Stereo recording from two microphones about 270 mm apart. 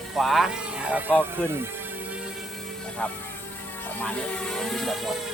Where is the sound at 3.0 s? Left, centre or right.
Centre.